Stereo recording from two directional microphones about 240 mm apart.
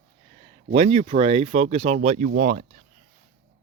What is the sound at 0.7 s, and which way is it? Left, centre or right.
Speech, right.